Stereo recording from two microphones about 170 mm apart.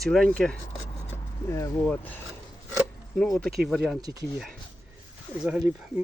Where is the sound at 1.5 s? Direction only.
20° left (ahead or behind).